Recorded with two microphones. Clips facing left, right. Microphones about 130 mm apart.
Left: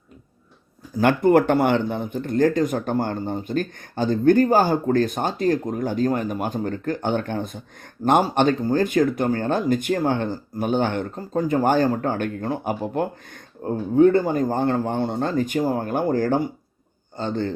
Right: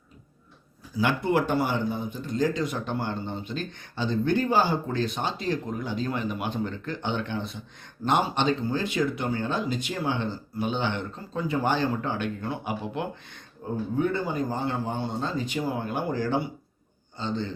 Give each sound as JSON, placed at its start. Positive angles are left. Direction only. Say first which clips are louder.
{"t": 0.9, "sound": "speech", "louder": "left 8 dB", "side_deg": 50}
{"t": 13.7, "sound": "speech", "louder": "left 10 dB", "side_deg": 75}
{"t": 14.1, "sound": "a man's voice", "louder": "left 8 dB", "side_deg": 50}